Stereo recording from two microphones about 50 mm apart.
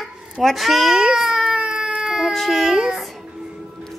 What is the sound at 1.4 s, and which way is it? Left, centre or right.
Baby cry, centre.